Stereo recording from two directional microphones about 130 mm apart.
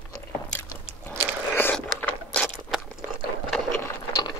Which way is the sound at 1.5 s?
15° left (ahead or behind).